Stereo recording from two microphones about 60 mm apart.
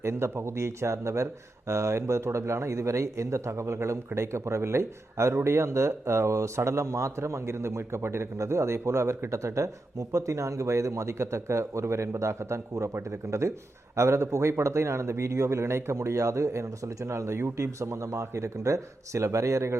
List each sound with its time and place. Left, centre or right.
0.0 s a man's voice: right